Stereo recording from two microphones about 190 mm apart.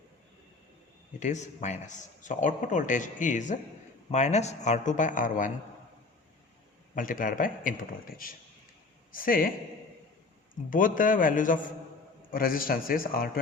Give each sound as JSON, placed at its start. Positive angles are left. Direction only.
{"t": 1.2, "sound": "speech", "side_deg": 40}
{"t": 6.9, "sound": "speech", "side_deg": 45}
{"t": 10.7, "sound": "speech", "side_deg": 45}